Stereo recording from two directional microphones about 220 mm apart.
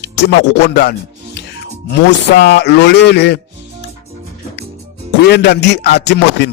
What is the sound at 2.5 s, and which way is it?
Speech, 50° left (ahead or behind).